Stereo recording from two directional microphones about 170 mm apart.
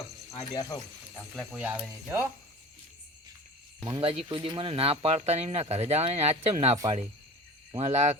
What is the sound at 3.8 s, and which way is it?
Speech, 25° right (ahead or behind).